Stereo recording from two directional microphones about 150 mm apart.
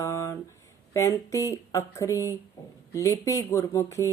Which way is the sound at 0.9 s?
20° left (ahead or behind).